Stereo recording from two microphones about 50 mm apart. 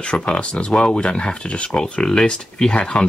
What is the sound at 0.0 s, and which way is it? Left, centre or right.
Speech, left.